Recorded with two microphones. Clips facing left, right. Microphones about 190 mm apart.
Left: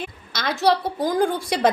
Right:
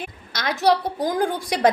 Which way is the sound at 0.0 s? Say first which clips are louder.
Even; 15° right (ahead or behind).